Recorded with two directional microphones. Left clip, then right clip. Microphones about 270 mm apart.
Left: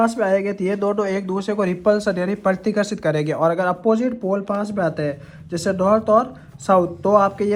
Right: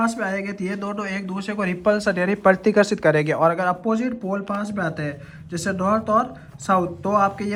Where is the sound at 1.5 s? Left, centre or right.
Centre.